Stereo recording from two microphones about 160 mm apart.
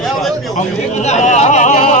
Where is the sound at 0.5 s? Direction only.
45° left (ahead or behind).